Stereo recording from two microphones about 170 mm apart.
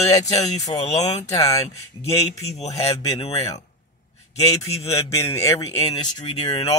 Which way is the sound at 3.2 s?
35° left (ahead or behind).